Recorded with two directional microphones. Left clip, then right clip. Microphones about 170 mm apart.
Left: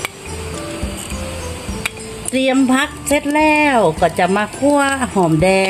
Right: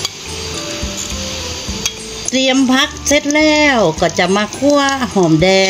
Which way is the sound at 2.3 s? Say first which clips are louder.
Right 2 dB; 60° right (ahead or behind).